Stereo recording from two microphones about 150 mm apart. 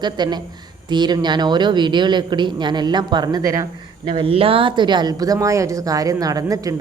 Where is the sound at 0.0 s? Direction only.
30° right (ahead or behind).